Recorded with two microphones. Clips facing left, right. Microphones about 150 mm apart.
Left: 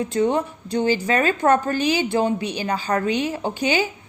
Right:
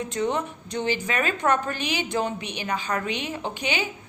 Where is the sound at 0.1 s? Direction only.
35° left (ahead or behind).